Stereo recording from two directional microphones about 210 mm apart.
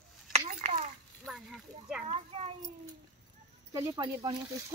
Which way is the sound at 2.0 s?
30° right (ahead or behind).